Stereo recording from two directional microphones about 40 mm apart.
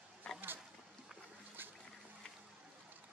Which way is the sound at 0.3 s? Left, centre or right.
Left.